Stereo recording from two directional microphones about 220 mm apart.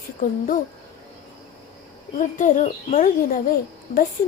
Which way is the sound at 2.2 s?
35° left (ahead or behind).